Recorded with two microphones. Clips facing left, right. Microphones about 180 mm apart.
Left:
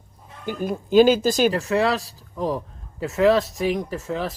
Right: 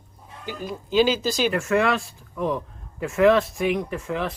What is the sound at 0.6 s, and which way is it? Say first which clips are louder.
Speech: left 5 dB; 50° left (ahead or behind).